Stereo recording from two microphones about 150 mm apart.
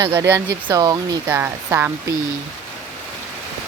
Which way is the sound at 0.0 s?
20° right (ahead or behind).